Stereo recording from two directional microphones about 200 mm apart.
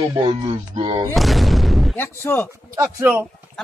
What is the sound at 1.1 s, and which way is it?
Speech, centre (ahead or behind).